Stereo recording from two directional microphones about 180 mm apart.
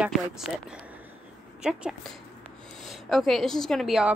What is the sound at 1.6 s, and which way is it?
A woman's voice, 5° right (ahead or behind).